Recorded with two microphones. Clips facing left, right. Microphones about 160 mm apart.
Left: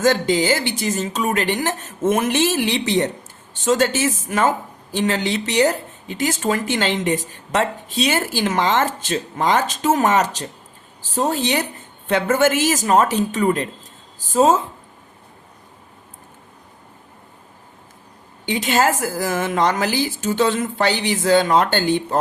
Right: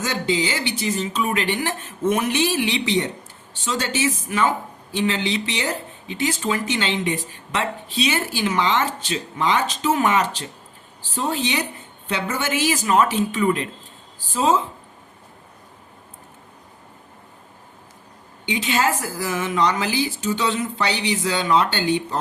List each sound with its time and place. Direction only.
0.0 s speech: 45° left (ahead or behind)
18.4 s speech: 45° left (ahead or behind)